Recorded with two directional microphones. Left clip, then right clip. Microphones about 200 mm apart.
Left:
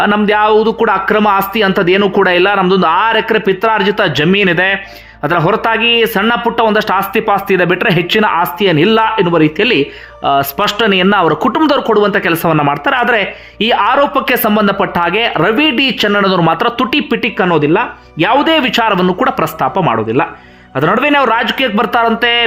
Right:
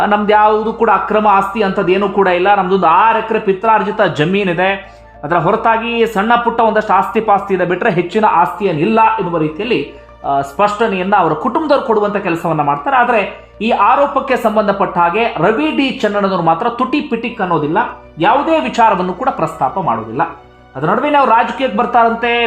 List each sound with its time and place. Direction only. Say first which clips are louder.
0.0 s speech: right 1 dB; 15° left (ahead or behind)